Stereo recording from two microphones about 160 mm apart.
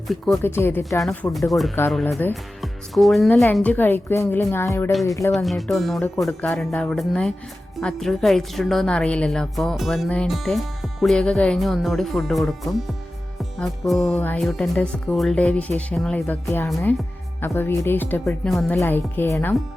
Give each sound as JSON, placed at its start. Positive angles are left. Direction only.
{"t": 0.4, "sound": "speech", "side_deg": 15}
{"t": 1.0, "sound": "a woman's voice", "side_deg": 5}
{"t": 5.3, "sound": "a woman's voice", "side_deg": 0}
{"t": 13.4, "sound": "music", "side_deg": 0}
{"t": 14.2, "sound": "speech", "side_deg": 10}
{"t": 18.8, "sound": "speech", "side_deg": 10}